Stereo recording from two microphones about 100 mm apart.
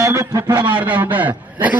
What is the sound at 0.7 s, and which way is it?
A man's voice, 15° right (ahead or behind).